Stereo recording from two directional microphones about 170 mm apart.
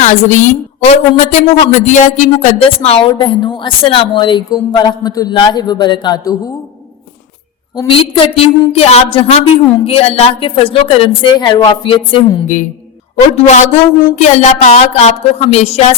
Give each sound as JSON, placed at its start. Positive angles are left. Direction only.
{"t": 0.0, "sound": "a woman's voice", "side_deg": 45}
{"t": 7.8, "sound": "a woman's voice", "side_deg": 30}
{"t": 13.3, "sound": "a woman's voice", "side_deg": 45}